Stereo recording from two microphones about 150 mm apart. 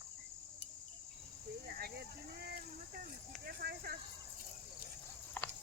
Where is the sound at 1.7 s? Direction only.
90° right.